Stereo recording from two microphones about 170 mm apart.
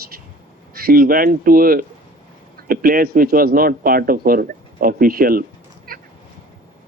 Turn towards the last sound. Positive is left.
turn(degrees=-60)  # may be behind; listen again after turning